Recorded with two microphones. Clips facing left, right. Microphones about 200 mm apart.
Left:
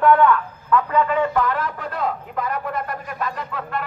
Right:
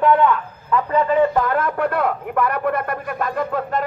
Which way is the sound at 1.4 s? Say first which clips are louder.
Right 5 dB; 50° right (ahead or behind).